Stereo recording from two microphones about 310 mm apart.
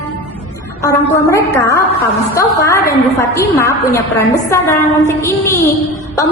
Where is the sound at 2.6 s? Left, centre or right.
Centre.